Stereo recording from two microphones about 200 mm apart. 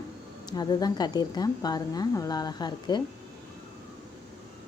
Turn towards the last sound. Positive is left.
turn(degrees=20)  # may be behind; listen again after turning